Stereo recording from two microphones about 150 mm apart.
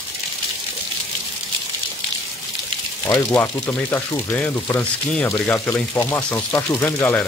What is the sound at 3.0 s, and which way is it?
Speech, 15° left (ahead or behind).